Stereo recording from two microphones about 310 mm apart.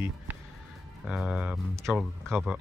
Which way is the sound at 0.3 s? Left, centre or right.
Centre.